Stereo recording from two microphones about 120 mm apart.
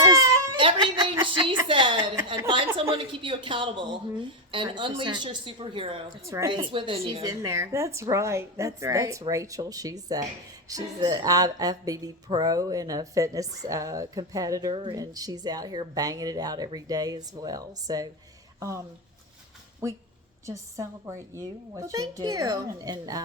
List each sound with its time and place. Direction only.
0.0 s baby cry: 25° right (ahead or behind)
0.6 s a sound: 45° right (ahead or behind)
1.6 s a woman's voice: 45° right (ahead or behind)
6.2 s a woman's voice: 25° right (ahead or behind)
6.5 s a woman's voice: 45° right (ahead or behind)
7.2 s a woman's voice: 30° right (ahead or behind)
14.7 s a woman's voice: 40° right (ahead or behind)
14.9 s a woman's voice: 30° right (ahead or behind)
19.8 s a woman's voice: 25° right (ahead or behind)